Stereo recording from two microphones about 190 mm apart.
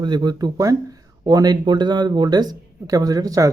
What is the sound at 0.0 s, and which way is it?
Speech, 25° right (ahead or behind).